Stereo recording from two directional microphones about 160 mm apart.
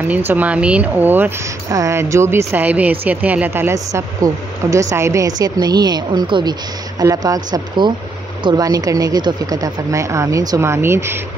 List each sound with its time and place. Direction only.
0.1 s speech: 10° right (ahead or behind)